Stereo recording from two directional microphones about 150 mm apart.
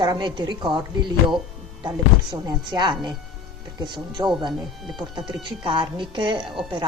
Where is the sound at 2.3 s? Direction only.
30° right (ahead or behind).